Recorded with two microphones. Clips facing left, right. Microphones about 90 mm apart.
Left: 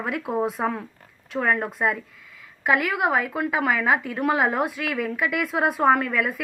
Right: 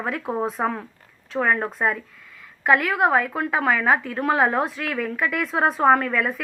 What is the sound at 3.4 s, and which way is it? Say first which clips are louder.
Speech: right 1 dB; 35° right (ahead or behind).